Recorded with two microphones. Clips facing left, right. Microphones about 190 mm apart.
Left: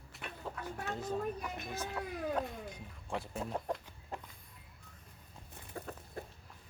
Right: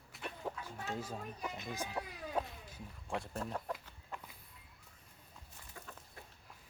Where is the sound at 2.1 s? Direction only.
55° left (ahead or behind).